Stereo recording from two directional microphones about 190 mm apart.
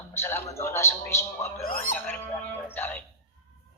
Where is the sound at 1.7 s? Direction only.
50° left (ahead or behind).